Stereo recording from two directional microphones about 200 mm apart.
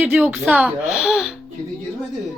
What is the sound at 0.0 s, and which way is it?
Speech, 5° right (ahead or behind).